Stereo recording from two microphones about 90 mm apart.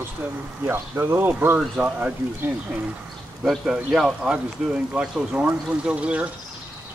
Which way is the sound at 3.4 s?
5° right (ahead or behind).